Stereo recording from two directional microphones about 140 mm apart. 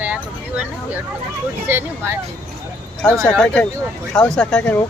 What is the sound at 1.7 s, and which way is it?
Speech, 15° right (ahead or behind).